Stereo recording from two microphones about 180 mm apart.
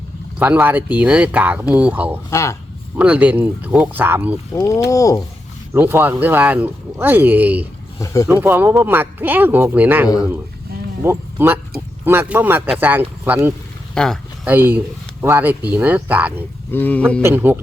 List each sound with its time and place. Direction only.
0.3 s speech: 10° right (ahead or behind)
2.3 s speech: 15° left (ahead or behind)
3.0 s speech: 10° right (ahead or behind)
4.5 s speech: 20° left (ahead or behind)
5.7 s speech: 10° right (ahead or behind)
7.9 s speech: 15° left (ahead or behind)
8.3 s speech: 10° right (ahead or behind)
13.9 s speech: 5° left (ahead or behind)
14.4 s speech: 10° right (ahead or behind)
16.7 s speech: 10° left (ahead or behind)
17.2 s speech: 10° right (ahead or behind)